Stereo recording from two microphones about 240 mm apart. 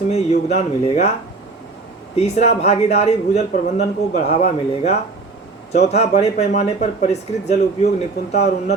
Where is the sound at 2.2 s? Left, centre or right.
Left.